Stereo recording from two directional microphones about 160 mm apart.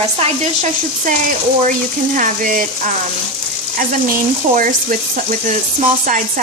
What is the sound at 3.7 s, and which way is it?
Speech, 55° right (ahead or behind).